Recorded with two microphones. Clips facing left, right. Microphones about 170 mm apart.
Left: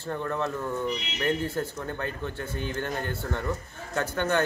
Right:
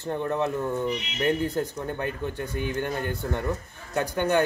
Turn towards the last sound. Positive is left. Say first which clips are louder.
# right 3 dB
turn(degrees=-15)  # may be behind; listen again after turning